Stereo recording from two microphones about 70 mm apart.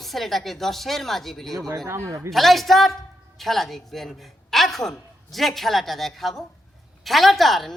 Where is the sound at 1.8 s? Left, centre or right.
Right.